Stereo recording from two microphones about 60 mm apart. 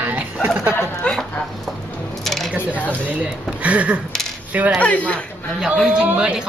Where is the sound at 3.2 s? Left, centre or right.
Right.